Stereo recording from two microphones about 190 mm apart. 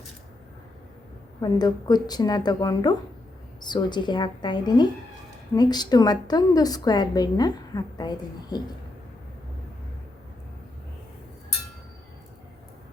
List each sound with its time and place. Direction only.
1.4 s a woman's voice: 20° left (ahead or behind)